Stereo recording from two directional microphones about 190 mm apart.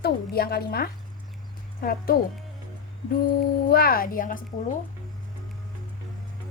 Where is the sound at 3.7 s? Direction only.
50° left (ahead or behind).